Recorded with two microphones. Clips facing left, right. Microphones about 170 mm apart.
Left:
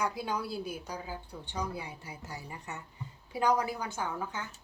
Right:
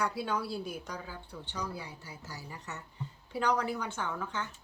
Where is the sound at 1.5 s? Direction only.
20° left (ahead or behind).